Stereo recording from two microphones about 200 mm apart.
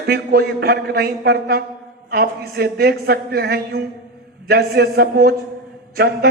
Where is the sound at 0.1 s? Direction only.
50° right (ahead or behind).